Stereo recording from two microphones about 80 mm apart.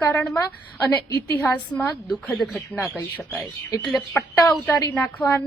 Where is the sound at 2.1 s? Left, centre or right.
Centre.